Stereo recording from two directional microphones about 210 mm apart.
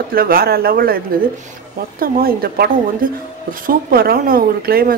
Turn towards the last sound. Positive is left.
turn(degrees=-45)  # may be behind; listen again after turning